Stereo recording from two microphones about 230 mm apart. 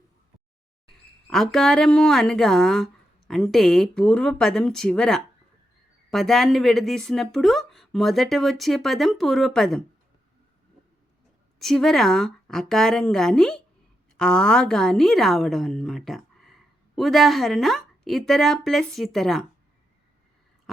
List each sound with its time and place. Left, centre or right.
1.3 s speech: centre
11.6 s a woman's voice: centre